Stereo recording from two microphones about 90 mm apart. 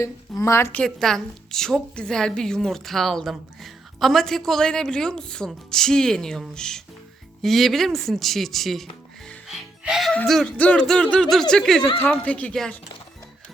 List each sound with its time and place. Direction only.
0.0 s a woman's voice: 35° left (ahead or behind)
0.9 s a woman's voice: 5° left (ahead or behind)
9.5 s music: 5° right (ahead or behind)
10.2 s a woman's voice: 5° left (ahead or behind)
10.6 s a woman's voice: 15° left (ahead or behind)